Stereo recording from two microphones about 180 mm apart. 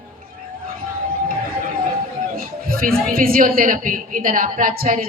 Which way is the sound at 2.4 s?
55° right (ahead or behind).